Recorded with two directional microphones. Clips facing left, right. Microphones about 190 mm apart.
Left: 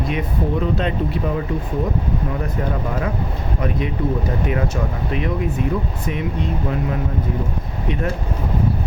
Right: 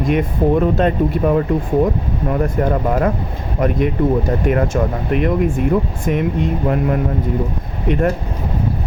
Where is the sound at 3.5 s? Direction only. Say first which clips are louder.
Right 7 dB; 50° right (ahead or behind).